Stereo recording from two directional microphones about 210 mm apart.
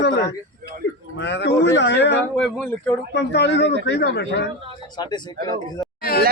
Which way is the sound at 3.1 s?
55° left (ahead or behind).